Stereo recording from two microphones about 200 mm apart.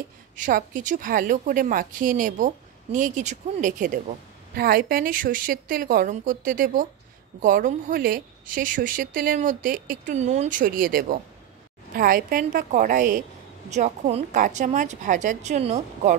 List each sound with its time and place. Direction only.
0.4 s a woman's voice: 40° right (ahead or behind)